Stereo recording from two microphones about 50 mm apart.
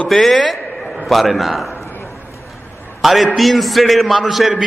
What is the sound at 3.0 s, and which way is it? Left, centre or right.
A man's voice, centre.